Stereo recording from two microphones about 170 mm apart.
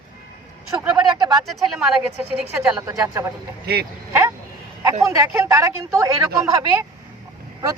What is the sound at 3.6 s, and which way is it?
Speech, 70° right (ahead or behind).